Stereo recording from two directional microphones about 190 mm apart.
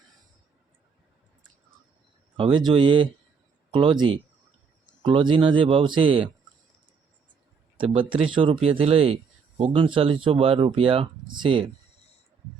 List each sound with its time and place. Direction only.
2.3 s speech: 25° right (ahead or behind)
7.9 s speech: 25° right (ahead or behind)